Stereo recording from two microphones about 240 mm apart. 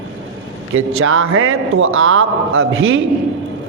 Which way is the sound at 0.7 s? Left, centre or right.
Right.